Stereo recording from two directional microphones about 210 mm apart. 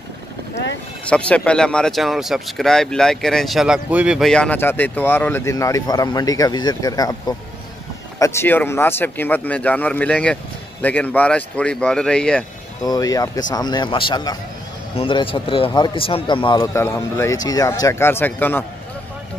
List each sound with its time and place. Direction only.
1.0 s speech: 5° left (ahead or behind)
12.8 s a man's voice: 15° left (ahead or behind)